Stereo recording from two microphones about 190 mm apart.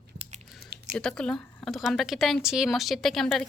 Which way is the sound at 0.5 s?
60° right (ahead or behind).